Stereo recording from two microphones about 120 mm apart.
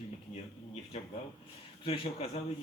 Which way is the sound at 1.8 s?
50° left (ahead or behind).